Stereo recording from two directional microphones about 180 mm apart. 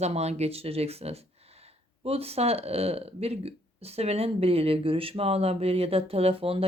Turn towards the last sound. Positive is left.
turn(degrees=-30)  # may be behind; listen again after turning